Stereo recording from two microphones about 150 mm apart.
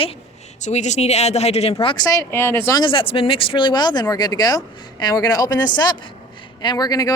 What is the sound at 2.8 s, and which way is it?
Speech, 35° left (ahead or behind).